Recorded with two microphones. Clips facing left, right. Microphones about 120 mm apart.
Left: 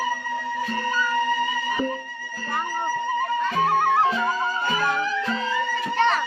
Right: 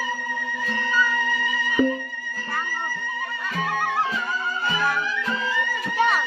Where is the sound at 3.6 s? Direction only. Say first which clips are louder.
Left 4 dB; 40° left (ahead or behind).